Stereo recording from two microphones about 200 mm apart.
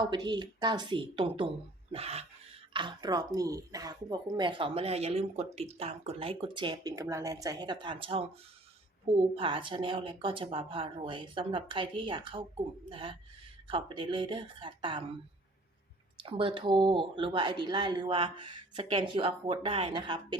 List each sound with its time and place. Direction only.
0.0 s speech: 20° right (ahead or behind)
9.3 s speech: 25° right (ahead or behind)
16.2 s speech: 25° right (ahead or behind)